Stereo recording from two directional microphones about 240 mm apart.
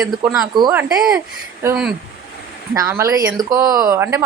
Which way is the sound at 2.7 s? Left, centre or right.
Centre.